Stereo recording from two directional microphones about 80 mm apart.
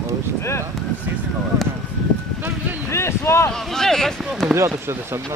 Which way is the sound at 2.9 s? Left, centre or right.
Left.